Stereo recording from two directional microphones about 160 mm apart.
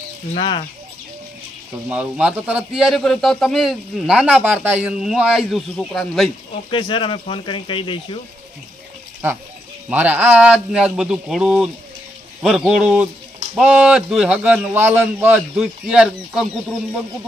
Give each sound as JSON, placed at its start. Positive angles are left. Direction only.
{"t": 0.4, "sound": "speech", "side_deg": 30}
{"t": 1.9, "sound": "a man's voice", "side_deg": -5}
{"t": 6.7, "sound": "speech", "side_deg": 30}
{"t": 9.8, "sound": "a man's voice", "side_deg": -10}